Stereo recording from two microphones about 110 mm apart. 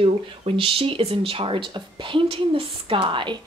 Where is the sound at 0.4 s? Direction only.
55° right (ahead or behind).